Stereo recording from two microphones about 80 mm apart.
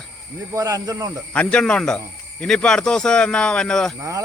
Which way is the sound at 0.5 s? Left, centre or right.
Right.